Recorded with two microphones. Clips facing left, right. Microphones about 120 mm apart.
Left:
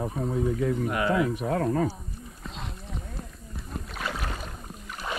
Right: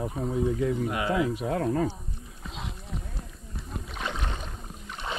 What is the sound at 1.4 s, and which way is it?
Speech, 45° left (ahead or behind).